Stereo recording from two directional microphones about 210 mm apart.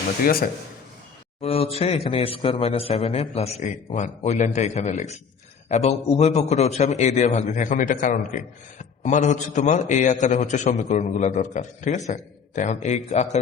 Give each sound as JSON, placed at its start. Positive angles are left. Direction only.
{"t": 0.3, "sound": "speech", "side_deg": 45}
{"t": 1.4, "sound": "a man's voice", "side_deg": 30}